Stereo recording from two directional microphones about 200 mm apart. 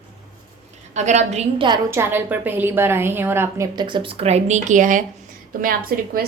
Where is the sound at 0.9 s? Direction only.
35° right (ahead or behind).